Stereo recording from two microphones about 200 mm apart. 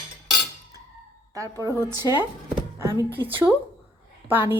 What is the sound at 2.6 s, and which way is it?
A woman's voice, 15° right (ahead or behind).